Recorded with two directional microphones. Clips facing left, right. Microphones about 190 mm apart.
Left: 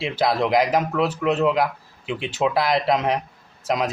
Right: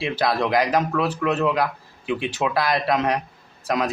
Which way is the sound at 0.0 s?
20° left (ahead or behind).